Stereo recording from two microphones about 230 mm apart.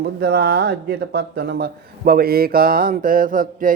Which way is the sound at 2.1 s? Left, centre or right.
Right.